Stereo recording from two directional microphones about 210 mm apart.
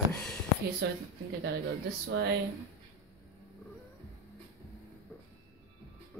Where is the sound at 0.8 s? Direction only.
55° right (ahead or behind).